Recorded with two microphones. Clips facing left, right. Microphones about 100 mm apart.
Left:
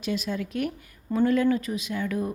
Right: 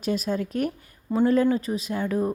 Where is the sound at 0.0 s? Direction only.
40° right (ahead or behind).